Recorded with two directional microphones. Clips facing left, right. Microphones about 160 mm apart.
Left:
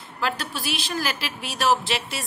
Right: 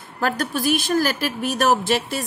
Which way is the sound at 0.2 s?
50° right (ahead or behind).